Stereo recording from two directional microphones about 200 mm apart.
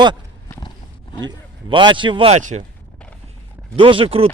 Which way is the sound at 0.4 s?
20° left (ahead or behind).